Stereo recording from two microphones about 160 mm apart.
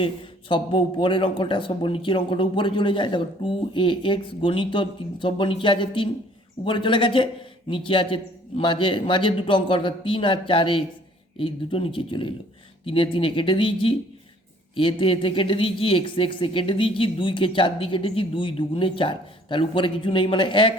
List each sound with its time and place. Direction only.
0.0 s speech: 30° left (ahead or behind)